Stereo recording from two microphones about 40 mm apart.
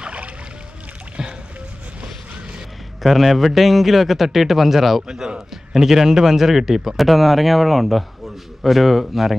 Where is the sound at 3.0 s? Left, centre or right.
Centre.